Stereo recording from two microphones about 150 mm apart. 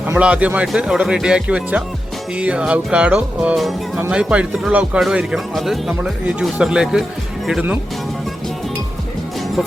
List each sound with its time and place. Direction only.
0.1 s speech: 10° right (ahead or behind)